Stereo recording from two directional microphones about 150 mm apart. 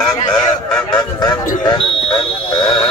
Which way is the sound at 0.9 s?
25° left (ahead or behind).